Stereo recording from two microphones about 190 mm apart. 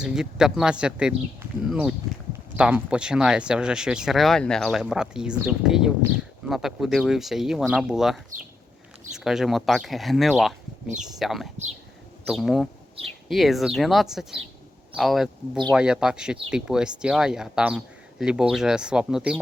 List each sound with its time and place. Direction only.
0.0 s speech: 5° right (ahead or behind)